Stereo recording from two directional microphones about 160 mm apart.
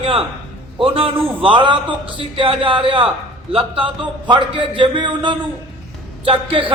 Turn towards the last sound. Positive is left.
turn(degrees=-35)  # may be behind; listen again after turning